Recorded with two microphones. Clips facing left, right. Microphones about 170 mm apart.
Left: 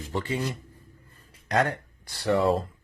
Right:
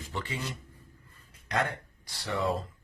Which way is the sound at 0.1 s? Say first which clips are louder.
Left 7 dB; 35° left (ahead or behind).